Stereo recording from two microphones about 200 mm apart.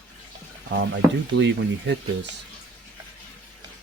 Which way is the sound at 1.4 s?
65° right (ahead or behind).